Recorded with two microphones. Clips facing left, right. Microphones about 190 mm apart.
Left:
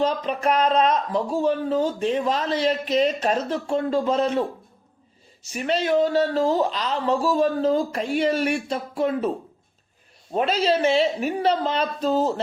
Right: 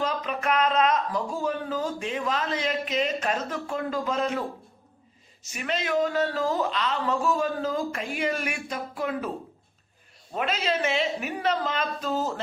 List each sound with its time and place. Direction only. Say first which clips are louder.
0.0 s speech: left 6 dB; 35° left (ahead or behind)
5.5 s speech: left 6 dB; 35° left (ahead or behind)
10.3 s speech: left 6 dB; 30° left (ahead or behind)